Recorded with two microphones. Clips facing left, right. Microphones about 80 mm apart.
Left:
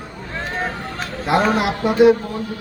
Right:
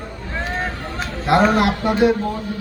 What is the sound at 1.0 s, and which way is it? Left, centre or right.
A man's voice, centre.